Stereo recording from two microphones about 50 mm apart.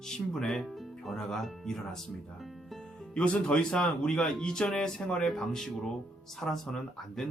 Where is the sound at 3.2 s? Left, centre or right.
Centre.